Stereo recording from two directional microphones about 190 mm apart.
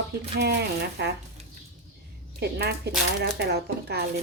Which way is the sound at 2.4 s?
60° right (ahead or behind).